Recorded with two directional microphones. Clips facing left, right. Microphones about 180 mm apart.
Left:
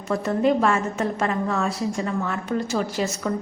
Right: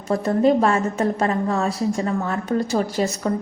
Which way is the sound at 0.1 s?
35° right (ahead or behind).